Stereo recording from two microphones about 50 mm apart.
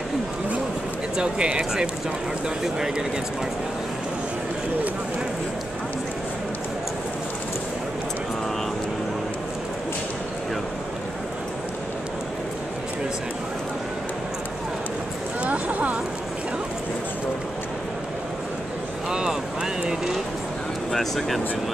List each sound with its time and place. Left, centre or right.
1.1 s speech: centre
15.4 s a sound: right
19.0 s vehicle: centre
20.9 s speech: centre